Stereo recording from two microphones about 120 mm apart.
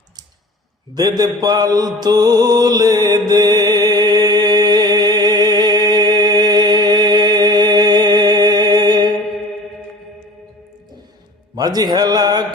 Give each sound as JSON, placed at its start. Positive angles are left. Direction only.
{"t": 0.9, "sound": "music", "side_deg": -35}
{"t": 11.5, "sound": "music", "side_deg": -35}